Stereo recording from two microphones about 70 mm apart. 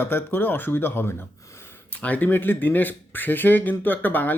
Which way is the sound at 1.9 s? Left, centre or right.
Left.